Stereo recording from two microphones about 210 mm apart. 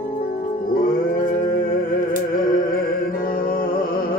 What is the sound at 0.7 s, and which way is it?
Music, 40° left (ahead or behind).